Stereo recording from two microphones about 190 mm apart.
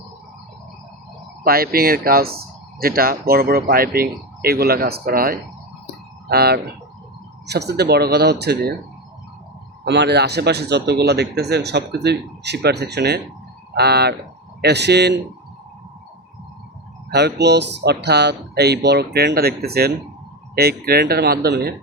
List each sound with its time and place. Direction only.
1.5 s a man's voice: 50° right (ahead or behind)
9.8 s a man's voice: 65° right (ahead or behind)
17.1 s a man's voice: 60° right (ahead or behind)